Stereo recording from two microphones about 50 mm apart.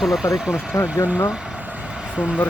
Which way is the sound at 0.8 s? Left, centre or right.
Left.